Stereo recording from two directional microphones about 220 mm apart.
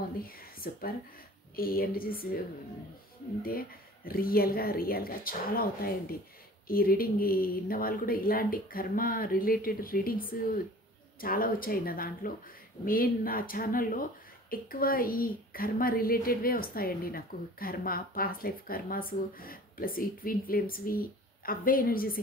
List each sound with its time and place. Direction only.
0.2 s speech: 40° left (ahead or behind)
3.4 s a woman's voice: 40° left (ahead or behind)